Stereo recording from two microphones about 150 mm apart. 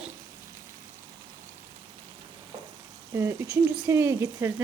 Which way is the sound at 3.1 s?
20° right (ahead or behind).